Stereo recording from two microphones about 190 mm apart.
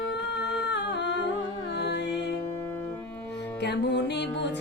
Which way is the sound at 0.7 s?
65° left (ahead or behind).